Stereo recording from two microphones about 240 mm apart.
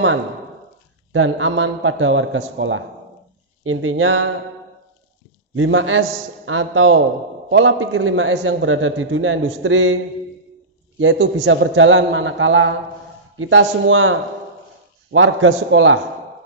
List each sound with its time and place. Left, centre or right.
1.1 s a man's voice: right
5.5 s a man's voice: right
11.0 s a man's voice: right
15.1 s a man's voice: right